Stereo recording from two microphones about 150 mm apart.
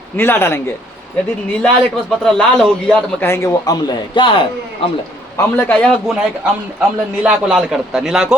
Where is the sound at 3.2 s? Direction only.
20° left (ahead or behind).